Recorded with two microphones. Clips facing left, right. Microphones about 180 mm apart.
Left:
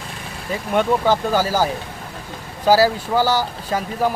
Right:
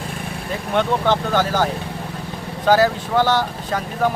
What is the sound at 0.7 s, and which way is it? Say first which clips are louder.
Speech: left 1 dB; 10° left (ahead or behind).